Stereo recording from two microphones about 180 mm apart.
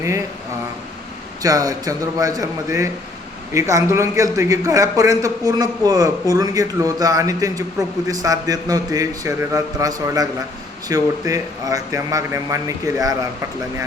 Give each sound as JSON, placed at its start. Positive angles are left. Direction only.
{"t": 1.4, "sound": "a man's voice", "side_deg": -20}